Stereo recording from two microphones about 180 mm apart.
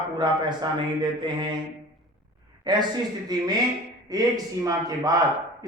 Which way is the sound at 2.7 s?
25° right (ahead or behind).